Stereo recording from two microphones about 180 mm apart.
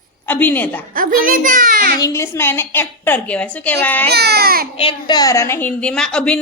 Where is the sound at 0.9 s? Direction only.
50° right (ahead or behind).